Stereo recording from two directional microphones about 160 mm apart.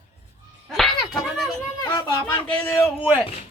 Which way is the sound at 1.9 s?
25° left (ahead or behind).